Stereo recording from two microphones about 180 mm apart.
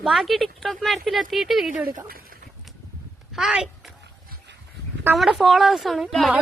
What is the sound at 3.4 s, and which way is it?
Speech, 5° right (ahead or behind).